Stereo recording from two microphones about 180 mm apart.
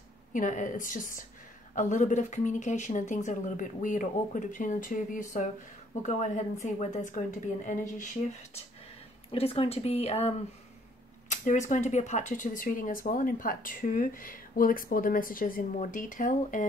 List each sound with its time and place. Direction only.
0.3 s speech: 45° left (ahead or behind)
9.3 s speech: 30° left (ahead or behind)
11.2 s a sound: 40° left (ahead or behind)
11.7 s speech: 40° left (ahead or behind)